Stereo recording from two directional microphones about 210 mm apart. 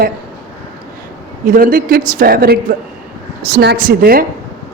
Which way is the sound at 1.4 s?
45° right (ahead or behind).